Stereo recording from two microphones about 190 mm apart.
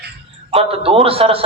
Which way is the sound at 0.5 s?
30° right (ahead or behind).